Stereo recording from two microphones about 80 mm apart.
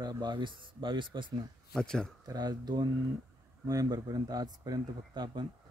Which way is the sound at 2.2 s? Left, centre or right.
Right.